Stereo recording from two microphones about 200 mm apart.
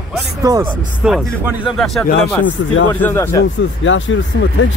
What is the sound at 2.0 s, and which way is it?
Speech, 55° left (ahead or behind).